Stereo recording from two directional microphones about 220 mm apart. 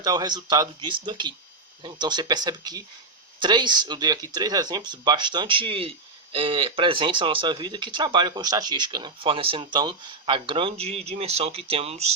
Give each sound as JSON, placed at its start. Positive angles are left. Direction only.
{"t": 0.0, "sound": "speech", "side_deg": -15}